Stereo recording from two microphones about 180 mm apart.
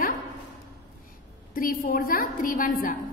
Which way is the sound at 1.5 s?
50° left (ahead or behind).